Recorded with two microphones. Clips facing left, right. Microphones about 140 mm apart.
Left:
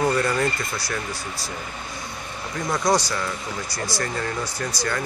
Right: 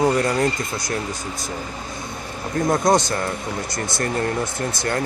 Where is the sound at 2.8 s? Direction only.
20° right (ahead or behind).